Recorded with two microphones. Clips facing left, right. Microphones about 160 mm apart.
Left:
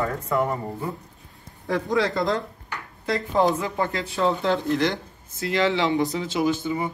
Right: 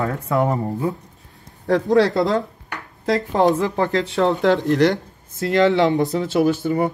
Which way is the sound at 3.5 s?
75° right (ahead or behind).